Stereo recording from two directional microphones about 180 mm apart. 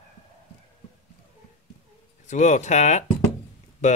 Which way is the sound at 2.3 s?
40° left (ahead or behind).